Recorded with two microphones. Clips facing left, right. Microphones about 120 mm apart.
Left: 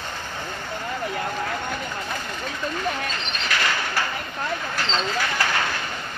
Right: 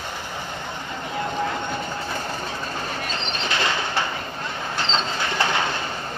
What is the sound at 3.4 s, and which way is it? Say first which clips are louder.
Bird: right 1 dB; 25° right (ahead or behind).